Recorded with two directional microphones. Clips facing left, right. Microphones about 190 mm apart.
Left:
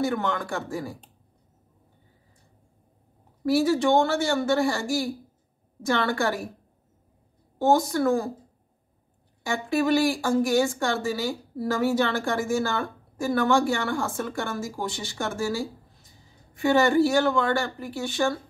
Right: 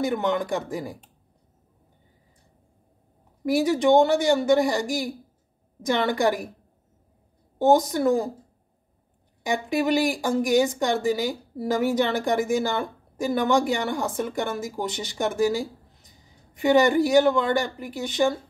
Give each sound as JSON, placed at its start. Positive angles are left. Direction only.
{"t": 0.0, "sound": "speech", "side_deg": -20}
{"t": 3.4, "sound": "speech", "side_deg": -20}
{"t": 7.5, "sound": "speech", "side_deg": -20}
{"t": 9.4, "sound": "speech", "side_deg": -15}